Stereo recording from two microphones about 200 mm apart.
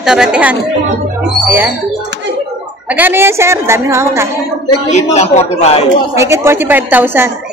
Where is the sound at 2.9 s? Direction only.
10° right (ahead or behind).